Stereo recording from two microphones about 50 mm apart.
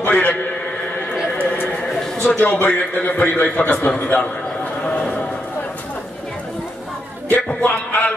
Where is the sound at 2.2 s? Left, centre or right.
Left.